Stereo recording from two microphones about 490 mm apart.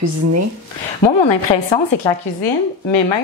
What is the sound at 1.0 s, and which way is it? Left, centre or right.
Speech, left.